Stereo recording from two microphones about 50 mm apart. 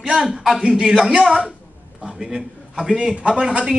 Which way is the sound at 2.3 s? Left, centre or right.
Centre.